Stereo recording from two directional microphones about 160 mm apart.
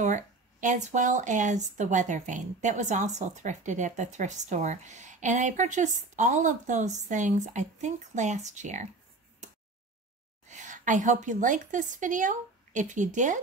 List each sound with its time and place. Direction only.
0.0 s speech: 50° right (ahead or behind)
10.5 s speech: 50° right (ahead or behind)